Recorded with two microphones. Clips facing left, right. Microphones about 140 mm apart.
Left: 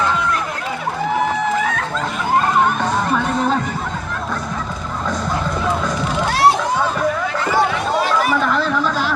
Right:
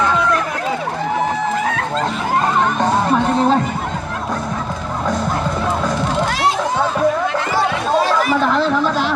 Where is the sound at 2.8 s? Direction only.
35° right (ahead or behind).